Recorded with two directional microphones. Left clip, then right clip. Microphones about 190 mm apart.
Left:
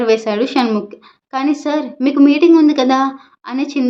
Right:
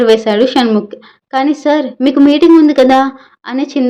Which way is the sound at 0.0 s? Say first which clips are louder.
Right 6 dB; 20° right (ahead or behind).